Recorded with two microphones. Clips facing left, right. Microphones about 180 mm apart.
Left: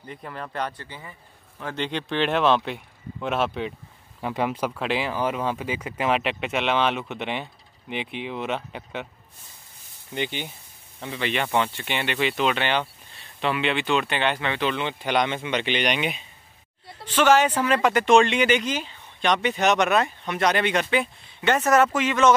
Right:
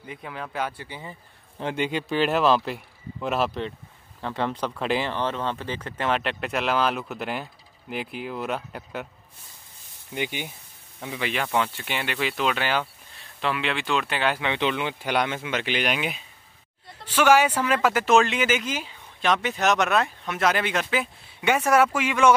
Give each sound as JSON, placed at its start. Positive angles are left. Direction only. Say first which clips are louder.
{"t": 0.0, "sound": "speech", "louder": "even", "side_deg": -5}
{"t": 0.8, "sound": "speech", "louder": "right 3 dB", "side_deg": -15}
{"t": 4.2, "sound": "speech", "louder": "left 2 dB", "side_deg": 10}
{"t": 10.1, "sound": "speech", "louder": "left 1 dB", "side_deg": -10}
{"t": 14.4, "sound": "speech", "louder": "even", "side_deg": -15}